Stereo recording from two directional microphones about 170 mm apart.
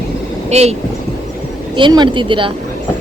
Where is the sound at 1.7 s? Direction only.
30° right (ahead or behind).